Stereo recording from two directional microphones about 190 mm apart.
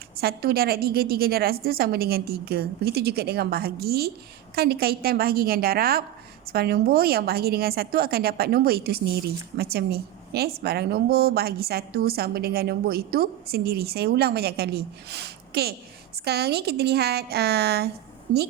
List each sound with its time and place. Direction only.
0.2 s a woman's voice: 55° right (ahead or behind)